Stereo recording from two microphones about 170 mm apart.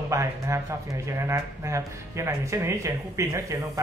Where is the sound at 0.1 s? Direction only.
15° right (ahead or behind).